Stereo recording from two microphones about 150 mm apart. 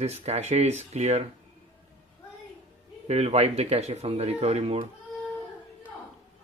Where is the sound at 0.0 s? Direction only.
45° right (ahead or behind).